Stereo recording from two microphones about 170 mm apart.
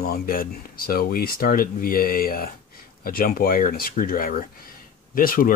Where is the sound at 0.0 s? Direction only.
60° left (ahead or behind).